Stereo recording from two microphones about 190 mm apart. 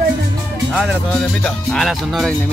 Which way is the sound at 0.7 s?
Centre (ahead or behind).